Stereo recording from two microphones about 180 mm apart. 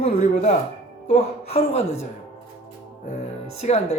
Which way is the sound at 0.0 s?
35° left (ahead or behind).